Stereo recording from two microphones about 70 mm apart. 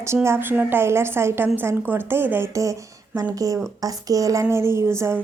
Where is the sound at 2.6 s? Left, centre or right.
Right.